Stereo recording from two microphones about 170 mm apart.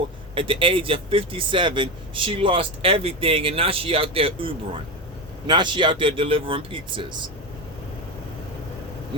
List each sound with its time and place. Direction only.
0.3 s speech: 30° right (ahead or behind)